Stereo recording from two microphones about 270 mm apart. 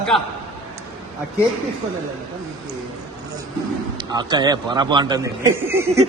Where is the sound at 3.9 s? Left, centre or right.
Centre.